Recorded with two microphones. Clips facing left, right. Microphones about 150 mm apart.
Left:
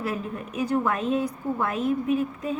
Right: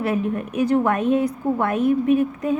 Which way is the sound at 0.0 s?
65° right (ahead or behind).